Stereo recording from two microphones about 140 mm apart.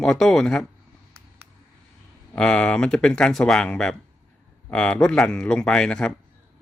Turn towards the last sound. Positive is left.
turn(degrees=5)  # may be behind; listen again after turning